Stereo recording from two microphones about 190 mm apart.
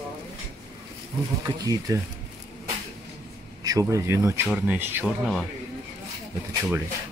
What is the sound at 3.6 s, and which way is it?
Speech, 20° right (ahead or behind).